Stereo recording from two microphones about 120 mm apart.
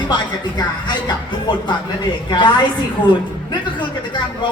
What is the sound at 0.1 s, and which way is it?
Speech, 35° left (ahead or behind).